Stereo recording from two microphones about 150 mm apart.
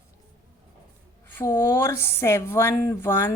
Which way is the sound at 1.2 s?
15° left (ahead or behind).